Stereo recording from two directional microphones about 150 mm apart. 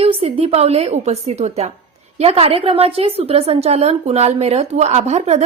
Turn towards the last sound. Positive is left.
turn(degrees=-50)  # may be behind; listen again after turning